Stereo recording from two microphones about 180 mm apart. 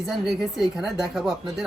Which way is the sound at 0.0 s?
Centre (ahead or behind).